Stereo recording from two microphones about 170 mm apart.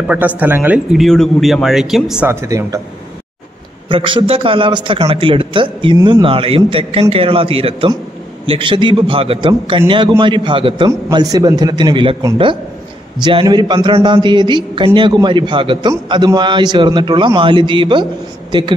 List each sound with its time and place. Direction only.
0.1 s speech: 10° right (ahead or behind)
1.0 s speech: 5° left (ahead or behind)
2.2 s speech: 20° right (ahead or behind)
3.9 s a man's voice: 30° right (ahead or behind)